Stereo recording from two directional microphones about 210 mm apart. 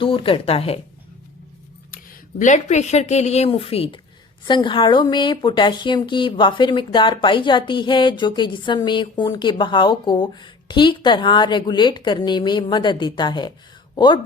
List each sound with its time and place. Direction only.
0.0 s speech: 25° left (ahead or behind)
1.9 s speech: 40° left (ahead or behind); by 14.2 s 20° left (ahead or behind)